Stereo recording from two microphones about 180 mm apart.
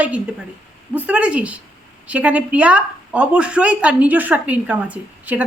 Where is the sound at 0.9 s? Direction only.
5° right (ahead or behind).